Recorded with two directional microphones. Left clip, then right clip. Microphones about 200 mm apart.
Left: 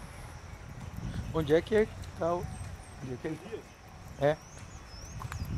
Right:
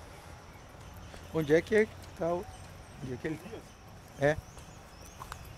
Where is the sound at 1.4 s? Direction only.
5° right (ahead or behind).